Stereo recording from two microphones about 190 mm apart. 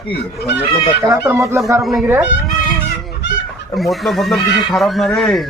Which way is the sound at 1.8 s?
Centre (ahead or behind).